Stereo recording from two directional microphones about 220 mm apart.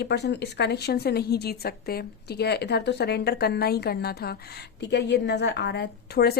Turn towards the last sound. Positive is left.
turn(degrees=45)  # may be behind; listen again after turning